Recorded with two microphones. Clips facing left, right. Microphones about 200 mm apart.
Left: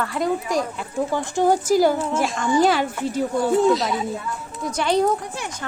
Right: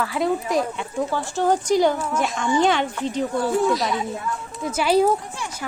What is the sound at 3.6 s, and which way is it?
Speech, 25° left (ahead or behind).